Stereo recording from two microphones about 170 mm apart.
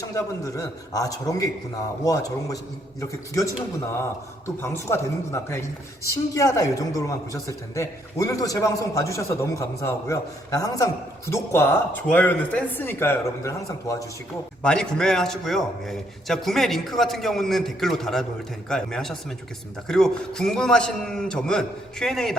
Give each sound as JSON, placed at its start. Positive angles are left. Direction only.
{"t": 0.1, "sound": "a man's voice", "side_deg": 20}
{"t": 14.6, "sound": "speech", "side_deg": 5}